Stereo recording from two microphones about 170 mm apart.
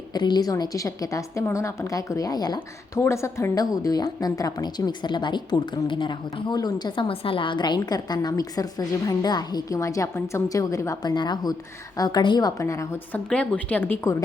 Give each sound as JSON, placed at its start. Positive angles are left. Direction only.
{"t": 0.1, "sound": "a woman's voice", "side_deg": 25}